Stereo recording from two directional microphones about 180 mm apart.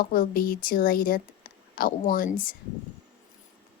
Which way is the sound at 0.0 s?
50° left (ahead or behind).